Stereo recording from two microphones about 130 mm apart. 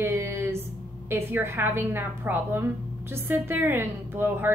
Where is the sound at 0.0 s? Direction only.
15° right (ahead or behind).